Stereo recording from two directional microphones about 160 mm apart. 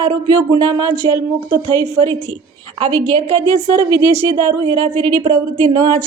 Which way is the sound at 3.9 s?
15° right (ahead or behind).